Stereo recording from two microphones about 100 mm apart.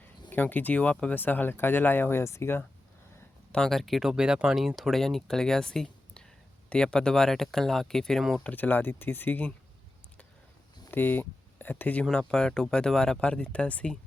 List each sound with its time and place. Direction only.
0.3 s speech: 15° left (ahead or behind)
3.5 s speech: 5° left (ahead or behind)
8.4 s speech: 15° left (ahead or behind)
10.9 s speech: 20° left (ahead or behind)